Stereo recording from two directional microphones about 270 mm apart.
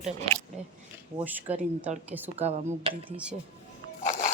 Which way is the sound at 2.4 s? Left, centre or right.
Right.